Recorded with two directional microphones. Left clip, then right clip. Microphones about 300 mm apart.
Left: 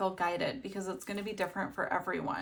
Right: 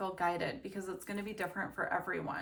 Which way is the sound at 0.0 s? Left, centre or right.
Centre.